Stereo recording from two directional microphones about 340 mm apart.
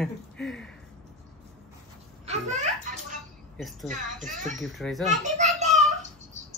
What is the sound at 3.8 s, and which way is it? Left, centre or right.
Speech, right.